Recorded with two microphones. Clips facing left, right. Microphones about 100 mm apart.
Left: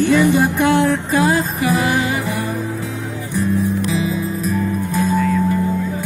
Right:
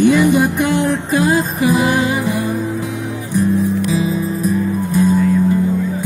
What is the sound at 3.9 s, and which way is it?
Music, 20° right (ahead or behind).